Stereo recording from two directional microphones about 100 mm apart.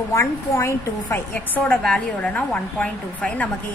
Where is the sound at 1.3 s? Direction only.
15° left (ahead or behind).